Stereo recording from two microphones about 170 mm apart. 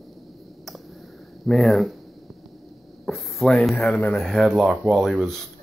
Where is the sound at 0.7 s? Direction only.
Centre (ahead or behind).